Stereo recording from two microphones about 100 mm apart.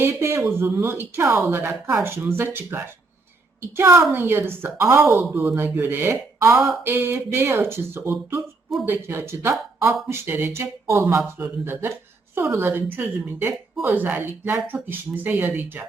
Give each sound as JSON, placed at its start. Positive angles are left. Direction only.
{"t": 0.0, "sound": "speech", "side_deg": -25}